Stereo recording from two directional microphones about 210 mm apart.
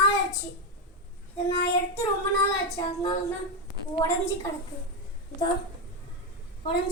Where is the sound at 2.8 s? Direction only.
20° left (ahead or behind).